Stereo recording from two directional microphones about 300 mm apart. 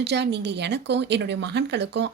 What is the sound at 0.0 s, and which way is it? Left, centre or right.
Speech, right.